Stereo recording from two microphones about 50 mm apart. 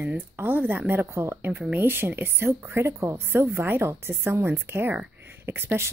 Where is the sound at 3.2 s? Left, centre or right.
Right.